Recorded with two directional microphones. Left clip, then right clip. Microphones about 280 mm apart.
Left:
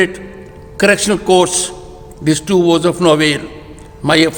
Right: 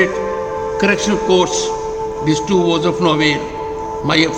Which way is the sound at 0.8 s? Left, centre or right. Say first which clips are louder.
Left 5 dB; left.